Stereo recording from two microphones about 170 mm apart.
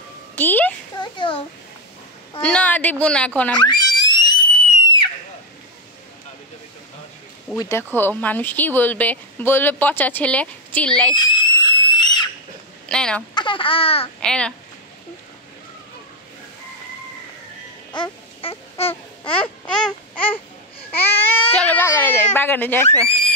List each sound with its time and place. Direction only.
0.4 s a sound: 10° left (ahead or behind)
0.9 s a child's voice: 25° left (ahead or behind)
2.4 s speech: 10° left (ahead or behind)
3.5 s a sound: 25° left (ahead or behind)
7.5 s speech: 15° left (ahead or behind)
11.1 s screaming: 25° left (ahead or behind)
12.8 s speech: 5° left (ahead or behind)
13.3 s speech: 30° left (ahead or behind)
14.2 s a child's voice: 5° left (ahead or behind)
17.9 s baby cry: 30° left (ahead or behind)
19.6 s babbling: 5° left (ahead or behind)
21.0 s speech: 10° left (ahead or behind)